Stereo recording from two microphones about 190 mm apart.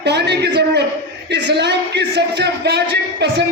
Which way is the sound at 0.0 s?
60° right (ahead or behind).